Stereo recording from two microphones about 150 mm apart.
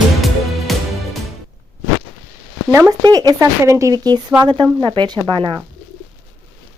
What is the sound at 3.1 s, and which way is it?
Speech, 25° right (ahead or behind).